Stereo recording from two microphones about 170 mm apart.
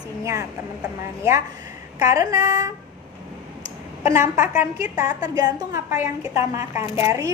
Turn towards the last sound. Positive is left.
turn(degrees=-20)  # may be behind; listen again after turning